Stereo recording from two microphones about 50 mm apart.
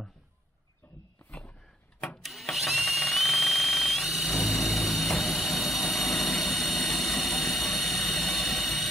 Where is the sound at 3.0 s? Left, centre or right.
Centre.